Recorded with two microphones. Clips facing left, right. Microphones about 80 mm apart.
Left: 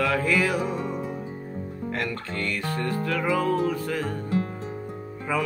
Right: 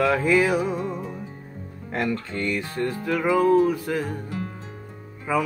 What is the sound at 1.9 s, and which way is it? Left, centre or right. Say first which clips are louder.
Speech: right 5 dB; right.